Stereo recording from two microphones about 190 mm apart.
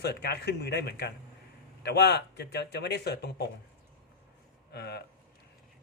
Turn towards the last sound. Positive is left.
turn(degrees=60)  # may be behind; listen again after turning